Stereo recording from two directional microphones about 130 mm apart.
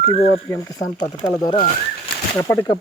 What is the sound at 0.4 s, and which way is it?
Speech, 20° left (ahead or behind).